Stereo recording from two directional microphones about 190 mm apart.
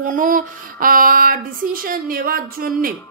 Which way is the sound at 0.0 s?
45° right (ahead or behind).